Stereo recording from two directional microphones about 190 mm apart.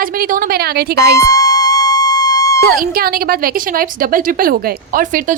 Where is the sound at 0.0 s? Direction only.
50° right (ahead or behind).